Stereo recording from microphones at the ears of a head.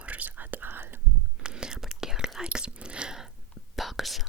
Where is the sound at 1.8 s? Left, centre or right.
Centre.